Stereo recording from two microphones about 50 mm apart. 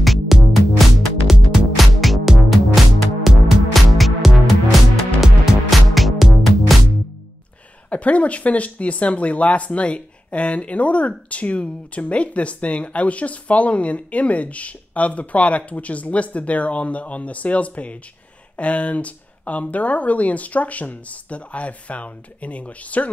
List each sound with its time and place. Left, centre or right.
0.0 s music: centre
1.3 s music: centre
1.8 s music: centre
7.9 s speech: left